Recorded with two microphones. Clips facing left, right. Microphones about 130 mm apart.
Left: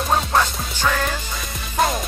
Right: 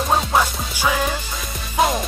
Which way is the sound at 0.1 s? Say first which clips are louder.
Even; 10° right (ahead or behind).